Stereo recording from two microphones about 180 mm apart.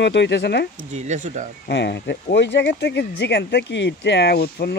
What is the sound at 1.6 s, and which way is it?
Speech, 70° left (ahead or behind).